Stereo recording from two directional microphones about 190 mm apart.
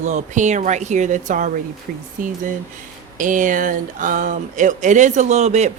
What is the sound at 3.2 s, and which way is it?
Speech, 45° right (ahead or behind).